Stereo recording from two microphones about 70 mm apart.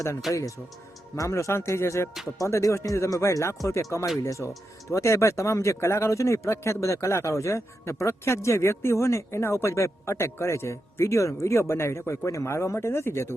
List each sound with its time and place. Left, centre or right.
1.1 s speech: left
2.4 s speech: left